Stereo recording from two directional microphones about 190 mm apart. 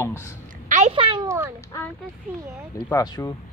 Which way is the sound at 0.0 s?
15° left (ahead or behind).